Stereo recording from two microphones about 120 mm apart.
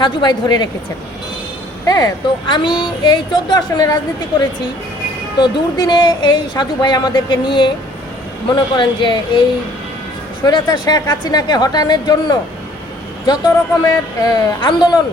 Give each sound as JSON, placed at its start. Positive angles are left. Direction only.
{"t": 0.0, "sound": "speech", "side_deg": 35}
{"t": 1.9, "sound": "speech", "side_deg": 30}
{"t": 10.4, "sound": "speech", "side_deg": 35}